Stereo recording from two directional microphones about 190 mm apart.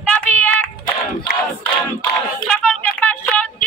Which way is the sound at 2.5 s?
10° left (ahead or behind).